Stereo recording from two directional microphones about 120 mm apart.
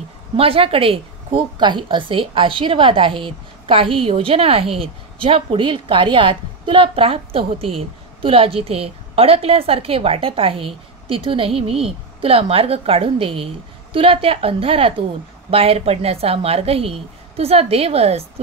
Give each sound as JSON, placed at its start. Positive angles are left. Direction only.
{"t": 0.4, "sound": "a woman's voice", "side_deg": -50}